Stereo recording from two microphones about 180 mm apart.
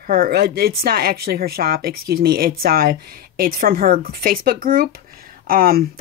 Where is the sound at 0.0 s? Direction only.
55° right (ahead or behind).